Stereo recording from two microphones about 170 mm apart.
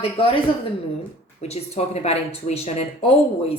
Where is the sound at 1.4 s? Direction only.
40° left (ahead or behind).